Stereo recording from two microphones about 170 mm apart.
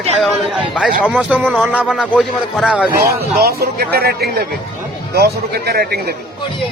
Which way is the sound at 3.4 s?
65° right (ahead or behind).